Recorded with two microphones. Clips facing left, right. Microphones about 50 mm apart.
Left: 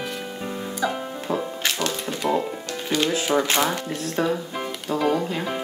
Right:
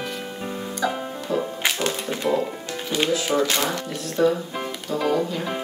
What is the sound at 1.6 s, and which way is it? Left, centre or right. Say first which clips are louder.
Music: right 1 dB; centre.